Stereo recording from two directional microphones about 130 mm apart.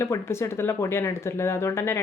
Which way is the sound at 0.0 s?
20° left (ahead or behind).